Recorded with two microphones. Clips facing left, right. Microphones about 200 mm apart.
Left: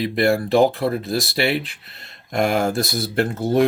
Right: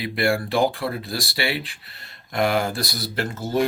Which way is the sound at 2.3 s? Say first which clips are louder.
Left 3 dB; 45° left (ahead or behind).